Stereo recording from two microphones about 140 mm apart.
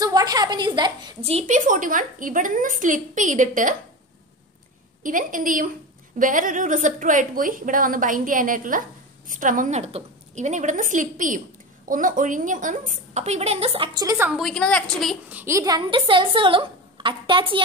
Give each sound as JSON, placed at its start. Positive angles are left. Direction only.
{"t": 0.0, "sound": "a woman's voice", "side_deg": -25}
{"t": 1.3, "sound": "a woman's voice", "side_deg": -65}
{"t": 5.0, "sound": "a woman's voice", "side_deg": -70}
{"t": 14.0, "sound": "a woman's voice", "side_deg": -15}
{"t": 14.3, "sound": "a woman's voice", "side_deg": 5}
{"t": 15.2, "sound": "a woman's voice", "side_deg": -15}